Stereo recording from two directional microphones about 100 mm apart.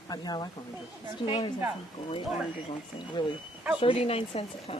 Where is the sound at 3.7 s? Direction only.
65° left (ahead or behind).